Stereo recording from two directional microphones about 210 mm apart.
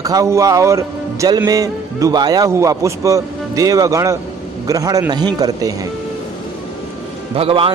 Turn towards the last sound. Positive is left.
turn(degrees=-25)  # may be behind; listen again after turning